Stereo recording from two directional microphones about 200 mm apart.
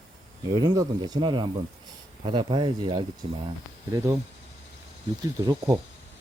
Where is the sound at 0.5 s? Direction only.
20° right (ahead or behind).